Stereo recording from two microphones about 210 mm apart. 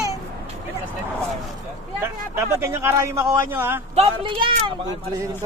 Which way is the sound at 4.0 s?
25° right (ahead or behind).